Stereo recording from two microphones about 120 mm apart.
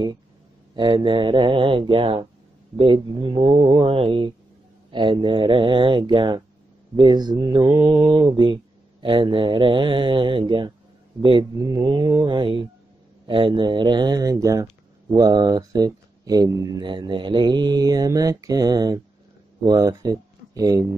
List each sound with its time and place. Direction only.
0.7 s speech: 40° right (ahead or behind)